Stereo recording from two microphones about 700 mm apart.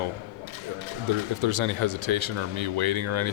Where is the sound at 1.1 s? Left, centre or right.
Right.